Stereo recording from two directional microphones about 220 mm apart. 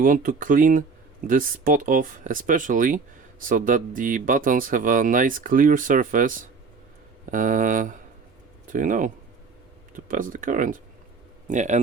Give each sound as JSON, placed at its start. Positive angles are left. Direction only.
{"t": 0.0, "sound": "speech", "side_deg": -40}